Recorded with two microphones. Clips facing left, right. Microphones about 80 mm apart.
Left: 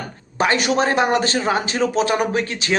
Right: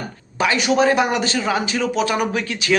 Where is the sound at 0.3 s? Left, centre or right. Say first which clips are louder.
Right 1 dB; left.